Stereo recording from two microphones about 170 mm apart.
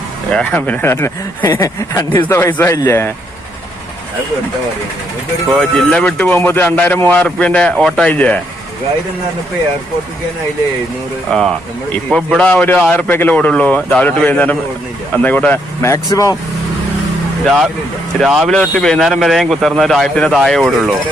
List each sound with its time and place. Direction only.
0.3 s speech: 5° left (ahead or behind)
5.5 s speech: 5° left (ahead or behind)
11.3 s a man's voice: centre (ahead or behind); by 16.3 s 20° left (ahead or behind)
17.4 s a man's voice: 5° right (ahead or behind)